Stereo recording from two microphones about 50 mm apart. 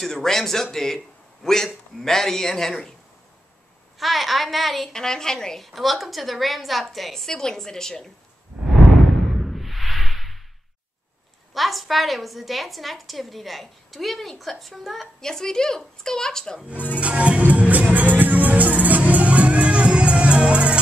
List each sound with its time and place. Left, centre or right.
0.0 s a man's voice: centre
4.0 s a woman's voice: centre
4.9 s a man's voice: centre
5.7 s a woman's voice: centre
9.5 s music: centre
11.5 s a woman's voice: centre
15.1 s a man's voice: centre
16.7 s speech: left
17.0 s music: right